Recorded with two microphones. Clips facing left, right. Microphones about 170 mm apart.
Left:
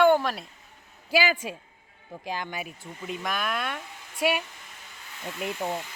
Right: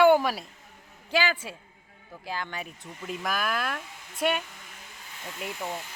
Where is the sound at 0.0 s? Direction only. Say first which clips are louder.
Right 1 dB; 10° right (ahead or behind).